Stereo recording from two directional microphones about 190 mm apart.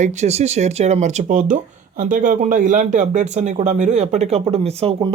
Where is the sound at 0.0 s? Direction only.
40° right (ahead or behind).